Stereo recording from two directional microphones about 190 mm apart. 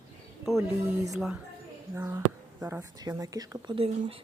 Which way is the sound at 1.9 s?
15° right (ahead or behind).